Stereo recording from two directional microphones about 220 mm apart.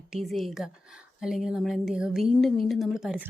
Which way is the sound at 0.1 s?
Centre (ahead or behind).